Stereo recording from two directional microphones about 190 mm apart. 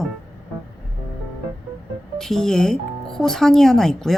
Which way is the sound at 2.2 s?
Centre (ahead or behind).